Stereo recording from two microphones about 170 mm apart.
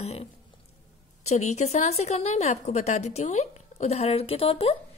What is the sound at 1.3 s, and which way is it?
A woman's voice, 40° left (ahead or behind).